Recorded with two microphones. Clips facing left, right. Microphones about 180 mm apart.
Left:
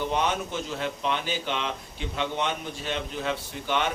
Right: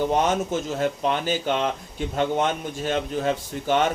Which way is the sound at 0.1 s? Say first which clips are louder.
Right 5 dB; 45° right (ahead or behind).